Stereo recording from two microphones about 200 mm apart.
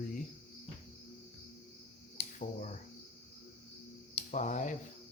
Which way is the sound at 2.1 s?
40° left (ahead or behind).